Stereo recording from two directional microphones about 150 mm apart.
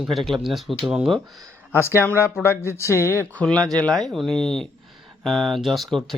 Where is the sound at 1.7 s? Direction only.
15° left (ahead or behind).